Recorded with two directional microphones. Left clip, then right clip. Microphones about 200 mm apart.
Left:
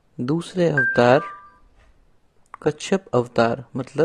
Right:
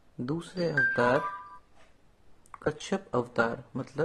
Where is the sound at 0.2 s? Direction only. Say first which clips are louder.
Left 11 dB; 40° left (ahead or behind).